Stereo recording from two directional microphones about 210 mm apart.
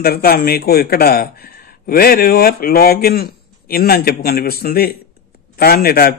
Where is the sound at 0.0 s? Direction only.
45° left (ahead or behind).